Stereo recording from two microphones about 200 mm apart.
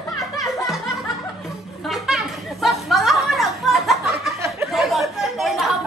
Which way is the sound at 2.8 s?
Centre (ahead or behind).